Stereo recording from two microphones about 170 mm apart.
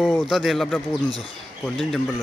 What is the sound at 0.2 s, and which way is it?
Speech, centre (ahead or behind).